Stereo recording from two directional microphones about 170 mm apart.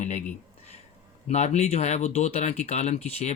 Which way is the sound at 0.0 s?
45° left (ahead or behind).